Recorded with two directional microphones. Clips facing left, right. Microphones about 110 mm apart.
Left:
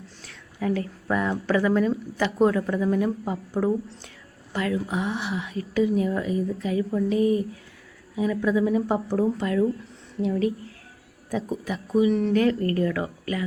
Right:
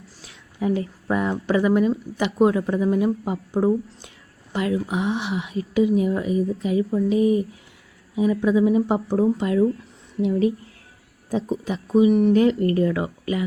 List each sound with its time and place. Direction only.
0.3 s a woman's voice: 20° right (ahead or behind)